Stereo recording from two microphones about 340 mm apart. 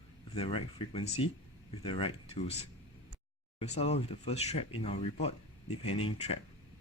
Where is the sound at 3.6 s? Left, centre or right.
Centre.